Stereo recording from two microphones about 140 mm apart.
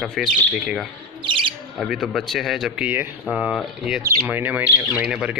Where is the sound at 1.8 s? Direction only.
Centre (ahead or behind).